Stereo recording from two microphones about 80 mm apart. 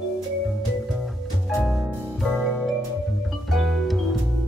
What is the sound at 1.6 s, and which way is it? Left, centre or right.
Music, centre.